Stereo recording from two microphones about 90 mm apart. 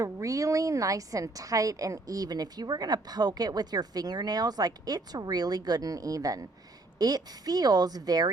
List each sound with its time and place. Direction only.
0.0 s a woman's voice: 40° right (ahead or behind)